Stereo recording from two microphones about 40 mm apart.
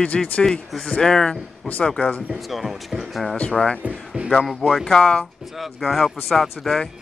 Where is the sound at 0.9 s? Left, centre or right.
Centre.